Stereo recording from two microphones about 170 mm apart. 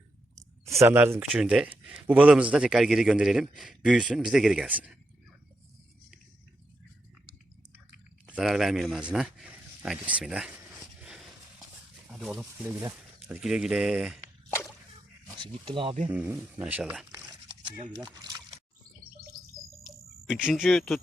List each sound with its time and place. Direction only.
0.6 s a man's voice: 15° right (ahead or behind)
8.3 s a man's voice: centre (ahead or behind)
15.6 s speech: 30° right (ahead or behind)
16.0 s speech: 10° right (ahead or behind)
17.9 s speech: 20° right (ahead or behind)
19.8 s cricket: 5° right (ahead or behind)